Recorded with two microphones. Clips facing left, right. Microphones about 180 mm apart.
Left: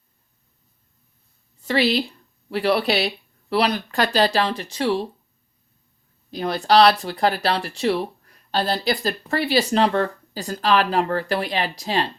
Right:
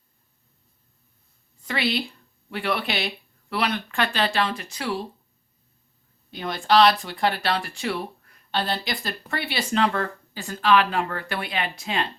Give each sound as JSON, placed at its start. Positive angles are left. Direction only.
{"t": 1.6, "sound": "a woman's voice", "side_deg": 35}
{"t": 6.3, "sound": "speech", "side_deg": 35}